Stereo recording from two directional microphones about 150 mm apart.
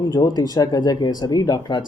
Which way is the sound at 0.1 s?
25° left (ahead or behind).